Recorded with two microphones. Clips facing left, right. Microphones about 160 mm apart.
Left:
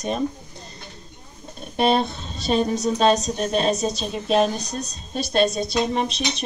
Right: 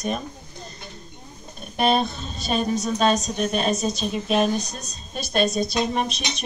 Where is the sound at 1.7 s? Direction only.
25° left (ahead or behind).